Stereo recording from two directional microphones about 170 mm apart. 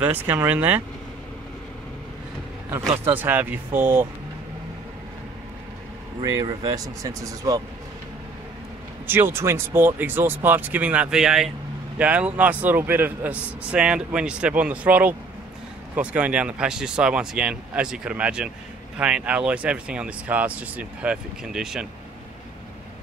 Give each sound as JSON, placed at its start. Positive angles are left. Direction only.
{"t": 0.0, "sound": "a man's voice", "side_deg": -10}
{"t": 2.9, "sound": "a man's voice", "side_deg": -10}
{"t": 6.4, "sound": "speech", "side_deg": -20}
{"t": 9.0, "sound": "a man's voice", "side_deg": -15}